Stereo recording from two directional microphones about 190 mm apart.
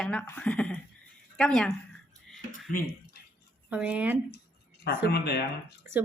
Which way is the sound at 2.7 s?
50° left (ahead or behind).